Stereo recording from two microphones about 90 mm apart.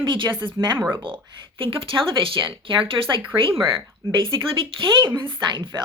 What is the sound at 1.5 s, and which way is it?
Speech, 85° right.